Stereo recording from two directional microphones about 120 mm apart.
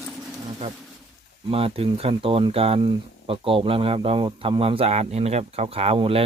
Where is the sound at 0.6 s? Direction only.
55° right (ahead or behind).